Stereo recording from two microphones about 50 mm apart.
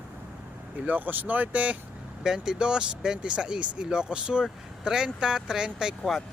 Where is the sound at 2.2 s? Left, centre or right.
Centre.